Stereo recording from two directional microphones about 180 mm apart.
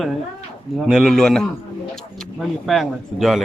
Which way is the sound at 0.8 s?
Centre (ahead or behind).